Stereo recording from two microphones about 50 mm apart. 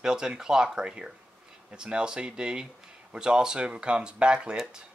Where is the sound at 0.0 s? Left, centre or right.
Centre.